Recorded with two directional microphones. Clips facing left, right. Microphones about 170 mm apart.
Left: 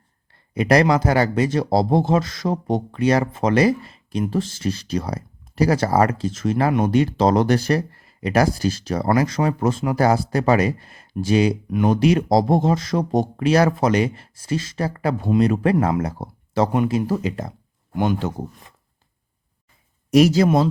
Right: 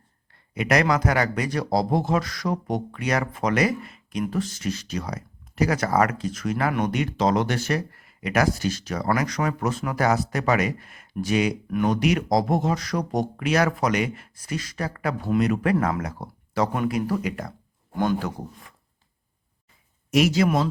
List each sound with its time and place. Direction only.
0.5 s speech: 35° left (ahead or behind)
20.1 s speech: 35° left (ahead or behind)